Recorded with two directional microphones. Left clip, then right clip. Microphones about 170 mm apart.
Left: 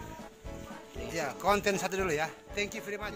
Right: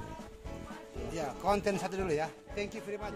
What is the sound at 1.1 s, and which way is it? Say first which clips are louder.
Speech: left 3 dB; 15° left (ahead or behind).